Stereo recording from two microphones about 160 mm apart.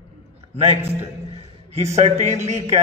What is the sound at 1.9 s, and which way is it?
Speech, 45° right (ahead or behind).